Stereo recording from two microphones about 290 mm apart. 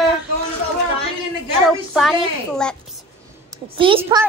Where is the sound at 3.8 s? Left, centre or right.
Centre.